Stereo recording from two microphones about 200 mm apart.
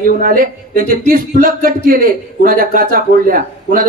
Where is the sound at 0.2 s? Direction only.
45° right (ahead or behind).